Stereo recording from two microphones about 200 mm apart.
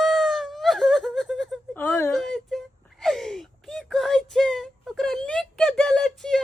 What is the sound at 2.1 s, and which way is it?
Whimper, centre (ahead or behind).